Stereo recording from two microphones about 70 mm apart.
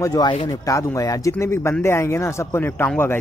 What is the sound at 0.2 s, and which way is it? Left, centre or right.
Speech, left.